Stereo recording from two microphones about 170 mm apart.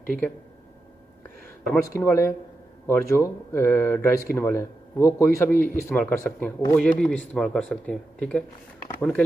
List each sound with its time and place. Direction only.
1.7 s speech: 15° left (ahead or behind)